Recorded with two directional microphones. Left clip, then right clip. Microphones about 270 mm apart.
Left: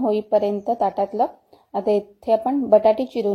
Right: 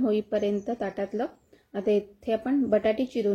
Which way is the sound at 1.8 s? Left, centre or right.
Centre.